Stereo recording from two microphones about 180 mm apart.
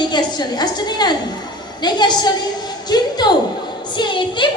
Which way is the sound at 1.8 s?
25° left (ahead or behind).